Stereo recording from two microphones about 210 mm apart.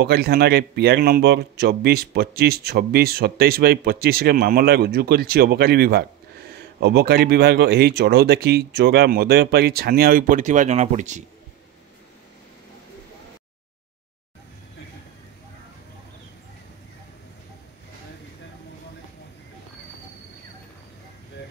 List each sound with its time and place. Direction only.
0.0 s speech: 50° right (ahead or behind)